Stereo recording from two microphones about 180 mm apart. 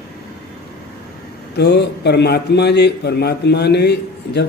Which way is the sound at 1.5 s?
70° left (ahead or behind).